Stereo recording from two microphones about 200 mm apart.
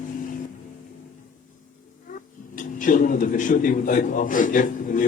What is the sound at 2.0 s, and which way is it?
Speech, 40° left (ahead or behind).